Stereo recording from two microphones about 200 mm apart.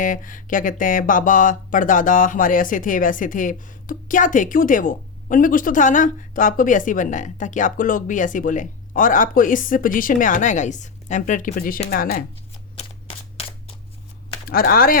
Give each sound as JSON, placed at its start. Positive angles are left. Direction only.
{"t": 0.0, "sound": "speech", "side_deg": 40}
{"t": 12.7, "sound": "a sound", "side_deg": 30}
{"t": 14.4, "sound": "speech", "side_deg": 45}